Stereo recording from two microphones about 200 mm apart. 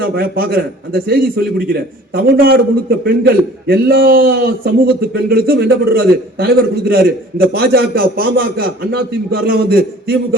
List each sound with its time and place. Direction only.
0.0 s a man's voice: 50° right (ahead or behind)